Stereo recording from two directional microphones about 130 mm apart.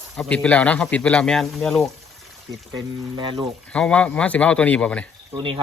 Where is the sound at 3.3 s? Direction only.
5° left (ahead or behind).